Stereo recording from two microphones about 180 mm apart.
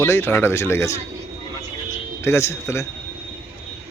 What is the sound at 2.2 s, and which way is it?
Speech, 15° left (ahead or behind).